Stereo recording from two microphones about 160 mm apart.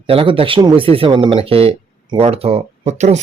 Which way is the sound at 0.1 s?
35° right (ahead or behind).